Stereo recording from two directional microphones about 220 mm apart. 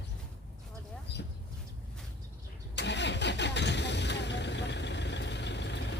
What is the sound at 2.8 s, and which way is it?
Engine starting, 50° left (ahead or behind).